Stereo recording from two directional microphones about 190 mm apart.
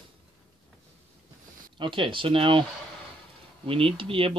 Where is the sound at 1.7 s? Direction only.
25° right (ahead or behind).